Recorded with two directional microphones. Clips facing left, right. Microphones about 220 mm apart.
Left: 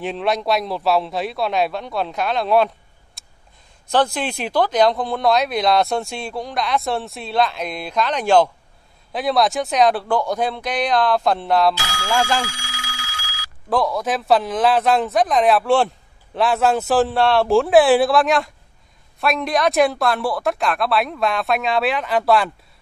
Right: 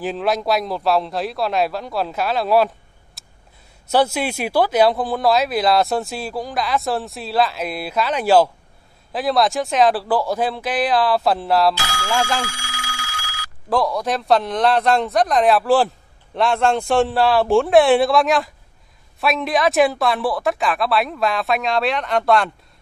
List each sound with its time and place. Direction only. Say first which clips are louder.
0.0 s a man's voice: right 1 dB; centre (ahead or behind)
3.2 s a sound: right 1 dB; centre (ahead or behind)
3.8 s a man's voice: right 1 dB; 10° right (ahead or behind)
12.4 s telephone bell ringing: right 1 dB; 55° right (ahead or behind)
13.7 s a man's voice: even; centre (ahead or behind)